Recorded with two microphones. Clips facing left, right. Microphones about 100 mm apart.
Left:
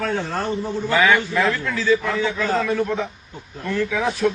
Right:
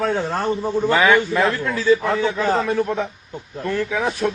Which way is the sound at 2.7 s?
35° right (ahead or behind).